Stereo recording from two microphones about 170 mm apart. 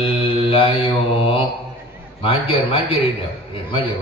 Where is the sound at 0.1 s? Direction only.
35° left (ahead or behind).